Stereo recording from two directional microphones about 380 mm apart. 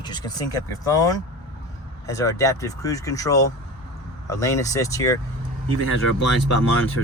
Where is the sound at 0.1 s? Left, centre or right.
Centre.